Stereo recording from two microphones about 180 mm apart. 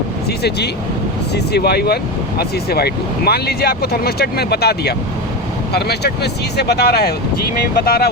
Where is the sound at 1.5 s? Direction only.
65° left (ahead or behind).